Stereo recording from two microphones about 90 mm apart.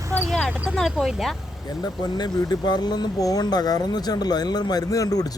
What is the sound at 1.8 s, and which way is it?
Speech, 50° left (ahead or behind).